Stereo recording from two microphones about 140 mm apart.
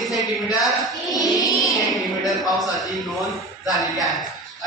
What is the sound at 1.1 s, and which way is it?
Music, 25° left (ahead or behind).